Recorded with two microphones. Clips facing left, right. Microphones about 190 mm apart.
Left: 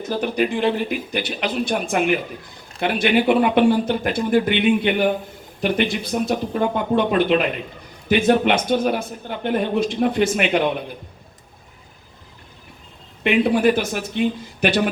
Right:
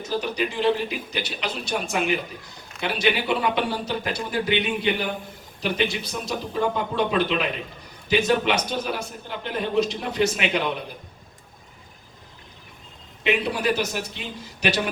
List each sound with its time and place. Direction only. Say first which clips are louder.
0.1 s a man's voice: left 5 dB; 50° left (ahead or behind)
13.2 s a man's voice: left 7 dB; 55° left (ahead or behind)